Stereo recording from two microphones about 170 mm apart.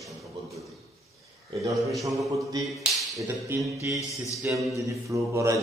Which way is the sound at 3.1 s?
15° right (ahead or behind).